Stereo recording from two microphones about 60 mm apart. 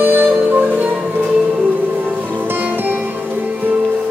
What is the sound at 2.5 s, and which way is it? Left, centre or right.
Music, right.